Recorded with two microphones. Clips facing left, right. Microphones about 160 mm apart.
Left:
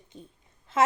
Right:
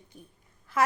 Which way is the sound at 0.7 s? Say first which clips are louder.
Left 2 dB; 25° left (ahead or behind).